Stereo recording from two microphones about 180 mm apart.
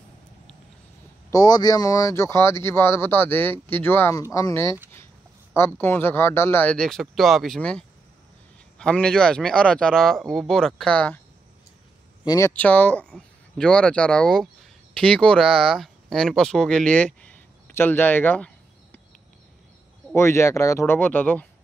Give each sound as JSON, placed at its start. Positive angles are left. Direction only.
{"t": 1.3, "sound": "speech", "side_deg": 20}
{"t": 12.3, "sound": "speech", "side_deg": 15}
{"t": 20.2, "sound": "speech", "side_deg": 15}